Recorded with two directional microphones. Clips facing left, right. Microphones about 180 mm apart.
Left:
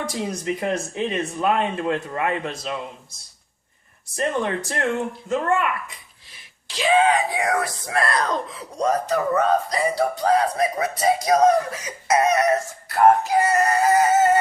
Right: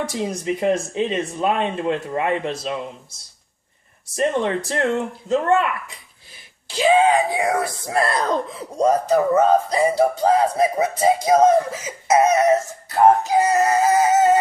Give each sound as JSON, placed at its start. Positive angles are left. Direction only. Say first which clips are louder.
{"t": 0.1, "sound": "speech", "louder": "right 2 dB", "side_deg": -20}
{"t": 4.1, "sound": "speech", "louder": "right 3 dB", "side_deg": -25}
{"t": 6.7, "sound": "speech", "louder": "right 3 dB", "side_deg": -30}